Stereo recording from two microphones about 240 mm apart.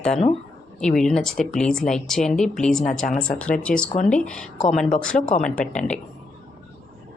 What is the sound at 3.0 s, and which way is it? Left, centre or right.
Speech, left.